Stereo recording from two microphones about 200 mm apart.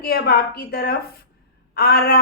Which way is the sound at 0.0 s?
50° left (ahead or behind).